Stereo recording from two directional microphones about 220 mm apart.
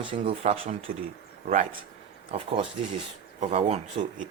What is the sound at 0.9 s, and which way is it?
Speech, 40° right (ahead or behind).